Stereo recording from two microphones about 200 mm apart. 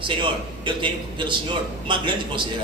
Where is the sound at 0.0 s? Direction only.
25° right (ahead or behind).